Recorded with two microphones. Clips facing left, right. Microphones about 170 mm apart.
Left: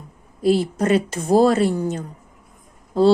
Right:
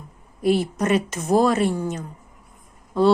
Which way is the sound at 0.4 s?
30° left (ahead or behind).